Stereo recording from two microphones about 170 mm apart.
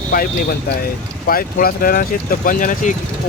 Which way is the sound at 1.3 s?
60° left (ahead or behind).